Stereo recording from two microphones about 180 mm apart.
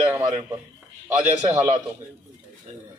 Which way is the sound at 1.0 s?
20° right (ahead or behind).